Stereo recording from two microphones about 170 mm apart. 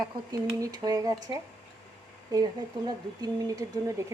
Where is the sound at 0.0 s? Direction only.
25° right (ahead or behind).